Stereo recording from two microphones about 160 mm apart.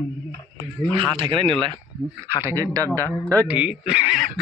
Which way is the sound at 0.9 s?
30° right (ahead or behind).